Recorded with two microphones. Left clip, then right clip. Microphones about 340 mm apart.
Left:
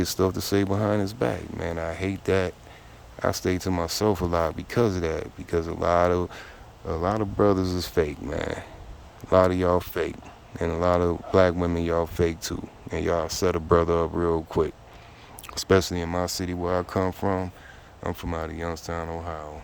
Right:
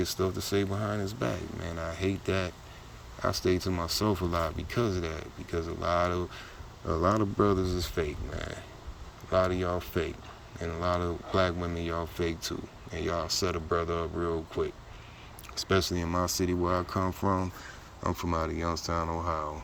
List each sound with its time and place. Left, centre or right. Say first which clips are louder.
0.0 s speech: left 6 dB; centre